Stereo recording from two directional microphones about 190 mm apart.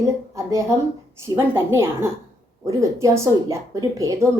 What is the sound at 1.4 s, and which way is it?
Speech, 15° right (ahead or behind).